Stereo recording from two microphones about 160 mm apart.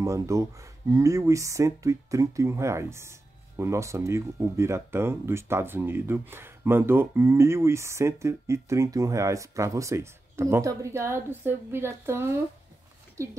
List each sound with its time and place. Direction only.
0.0 s speech: 20° right (ahead or behind)